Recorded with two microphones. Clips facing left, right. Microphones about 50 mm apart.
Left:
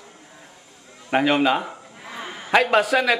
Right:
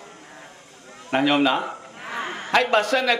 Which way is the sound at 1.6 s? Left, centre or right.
Right.